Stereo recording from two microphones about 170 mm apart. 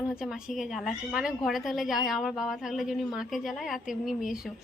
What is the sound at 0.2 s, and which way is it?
A woman's voice, 5° right (ahead or behind).